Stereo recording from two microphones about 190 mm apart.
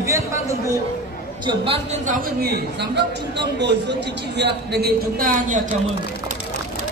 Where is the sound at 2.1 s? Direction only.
55° right (ahead or behind).